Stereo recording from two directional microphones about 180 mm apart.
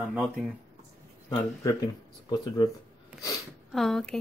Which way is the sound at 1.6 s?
20° left (ahead or behind).